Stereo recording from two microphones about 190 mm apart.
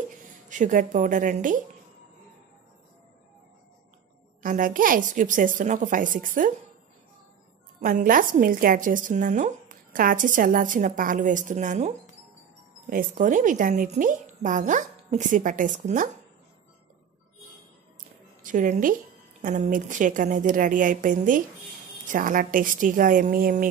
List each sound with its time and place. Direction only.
0.5 s a woman's voice: 40° right (ahead or behind)
4.4 s a woman's voice: 45° right (ahead or behind)
7.8 s a woman's voice: 45° right (ahead or behind)
12.9 s a woman's voice: 45° right (ahead or behind)
18.4 s a woman's voice: 45° right (ahead or behind)